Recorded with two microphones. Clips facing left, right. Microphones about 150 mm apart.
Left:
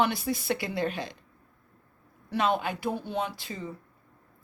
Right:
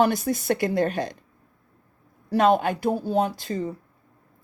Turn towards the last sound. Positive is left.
turn(degrees=-45)  # may be behind; listen again after turning